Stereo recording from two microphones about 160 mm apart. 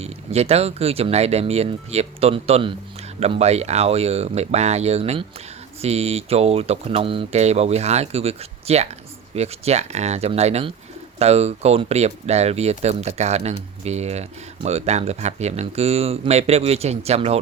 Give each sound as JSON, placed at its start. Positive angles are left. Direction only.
{"t": 0.0, "sound": "speech", "side_deg": -40}